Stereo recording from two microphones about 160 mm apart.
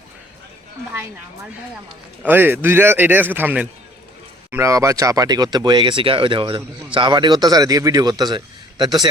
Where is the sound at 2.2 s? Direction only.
10° right (ahead or behind).